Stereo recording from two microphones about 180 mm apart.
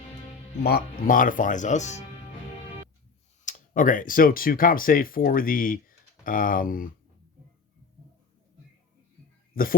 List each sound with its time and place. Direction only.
0.6 s speech: 55° left (ahead or behind)
3.4 s speech: 50° left (ahead or behind)
9.5 s speech: 55° left (ahead or behind)